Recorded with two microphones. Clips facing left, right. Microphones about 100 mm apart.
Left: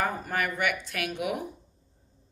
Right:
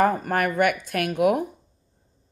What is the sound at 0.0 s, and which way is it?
Speech, 50° right (ahead or behind).